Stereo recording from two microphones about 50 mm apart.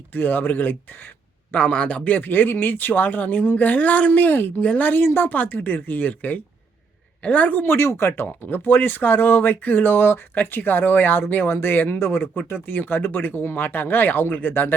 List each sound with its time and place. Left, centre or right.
0.1 s speech: left
1.7 s a woman's voice: left
2.0 s a woman's voice: left
7.6 s speech: left